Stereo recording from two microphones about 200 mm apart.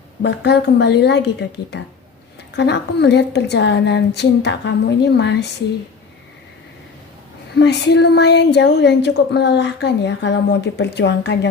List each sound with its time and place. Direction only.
0.2 s a woman's voice: 55° left (ahead or behind)
7.5 s a woman's voice: 60° left (ahead or behind)